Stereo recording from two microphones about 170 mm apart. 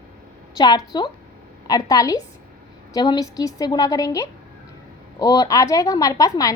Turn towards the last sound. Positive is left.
turn(degrees=20)  # may be behind; listen again after turning